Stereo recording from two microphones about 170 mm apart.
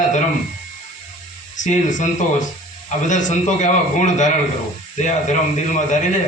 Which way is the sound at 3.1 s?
45° left (ahead or behind).